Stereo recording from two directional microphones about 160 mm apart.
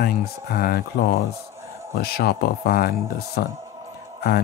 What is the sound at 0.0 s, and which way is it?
Speech, 75° left (ahead or behind).